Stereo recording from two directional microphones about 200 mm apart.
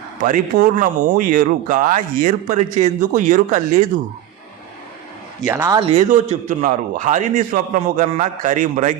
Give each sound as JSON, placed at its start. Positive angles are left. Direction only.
{"t": 0.2, "sound": "speech", "side_deg": -45}
{"t": 5.5, "sound": "speech", "side_deg": -15}
{"t": 5.9, "sound": "speech", "side_deg": -35}